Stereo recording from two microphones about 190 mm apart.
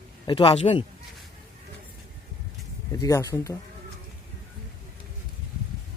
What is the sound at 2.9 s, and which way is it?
Speech, 20° left (ahead or behind).